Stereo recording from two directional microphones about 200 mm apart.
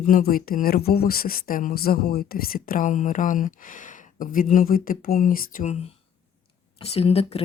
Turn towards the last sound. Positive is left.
turn(degrees=30)  # may be behind; listen again after turning